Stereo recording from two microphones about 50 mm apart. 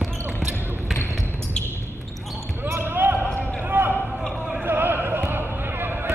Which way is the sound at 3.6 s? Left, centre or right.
Right.